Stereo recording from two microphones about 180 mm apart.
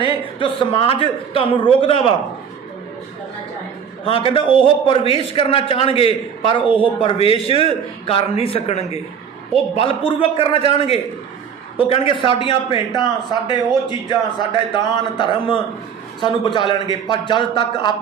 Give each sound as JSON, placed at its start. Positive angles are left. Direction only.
{"t": 0.0, "sound": "a man's voice", "side_deg": 30}
{"t": 4.0, "sound": "a man's voice", "side_deg": 30}